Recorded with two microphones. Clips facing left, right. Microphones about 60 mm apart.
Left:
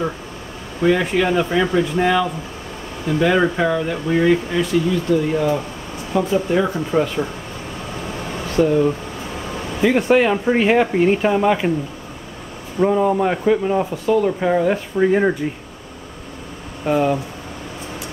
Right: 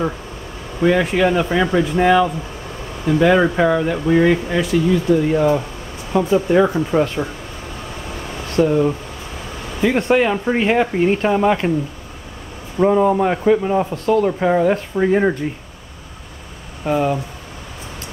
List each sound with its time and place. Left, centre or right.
0.7 s speech: centre
8.6 s speech: centre
9.8 s speech: centre
12.7 s speech: centre
13.9 s speech: centre
14.2 s speech: centre
16.8 s speech: centre